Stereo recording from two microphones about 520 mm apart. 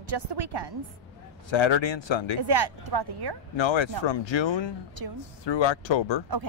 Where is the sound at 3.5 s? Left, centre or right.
Left.